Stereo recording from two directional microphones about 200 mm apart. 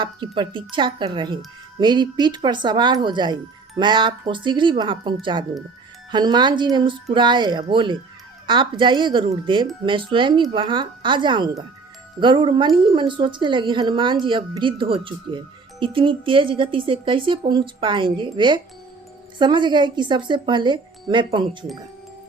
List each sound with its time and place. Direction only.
0.0 s a woman's voice: 25° right (ahead or behind)